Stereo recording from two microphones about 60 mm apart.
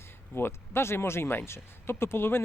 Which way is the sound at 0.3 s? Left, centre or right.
Left.